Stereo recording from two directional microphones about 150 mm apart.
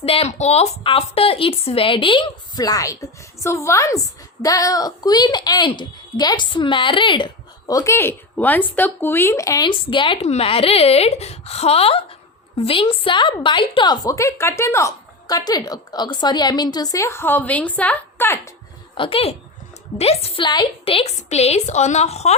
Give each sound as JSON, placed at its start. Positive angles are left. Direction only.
{"t": 0.0, "sound": "a woman's voice", "side_deg": 40}
{"t": 7.7, "sound": "a woman's voice", "side_deg": 20}
{"t": 18.9, "sound": "a woman's voice", "side_deg": 35}